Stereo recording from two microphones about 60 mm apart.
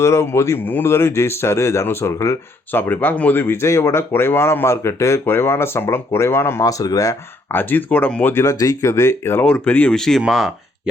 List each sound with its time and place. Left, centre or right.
0.0 s speech: left
2.1 s speech: left
2.7 s speech: left
5.2 s speech: left
6.6 s speech: left
7.5 s speech: left
8.4 s speech: left
9.4 s speech: left
9.9 s speech: centre
10.2 s speech: centre